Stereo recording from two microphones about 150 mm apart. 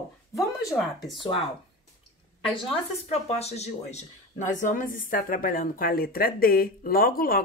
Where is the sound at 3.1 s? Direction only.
45° left (ahead or behind).